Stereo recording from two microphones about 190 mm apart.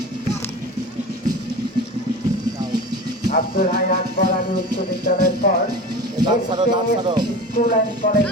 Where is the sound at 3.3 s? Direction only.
45° left (ahead or behind).